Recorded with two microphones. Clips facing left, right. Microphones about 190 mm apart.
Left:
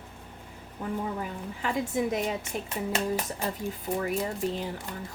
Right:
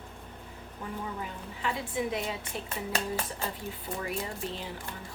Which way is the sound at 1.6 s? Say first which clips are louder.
Left 4 dB; 45° left (ahead or behind).